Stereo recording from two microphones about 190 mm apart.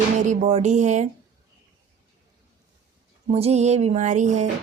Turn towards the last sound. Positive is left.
turn(degrees=-40)  # may be behind; listen again after turning